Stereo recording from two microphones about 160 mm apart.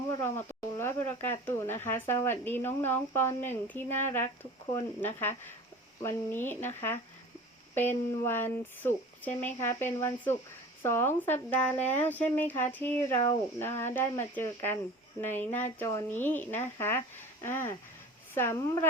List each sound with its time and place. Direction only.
0.2 s speech: 15° left (ahead or behind)